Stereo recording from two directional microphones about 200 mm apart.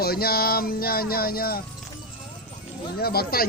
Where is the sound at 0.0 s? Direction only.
50° left (ahead or behind).